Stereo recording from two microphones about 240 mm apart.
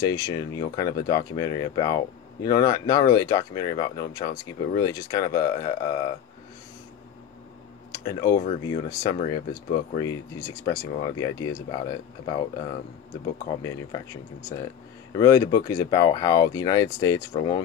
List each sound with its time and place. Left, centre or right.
0.0 s speech: centre
7.9 s speech: centre
13.5 s speech: centre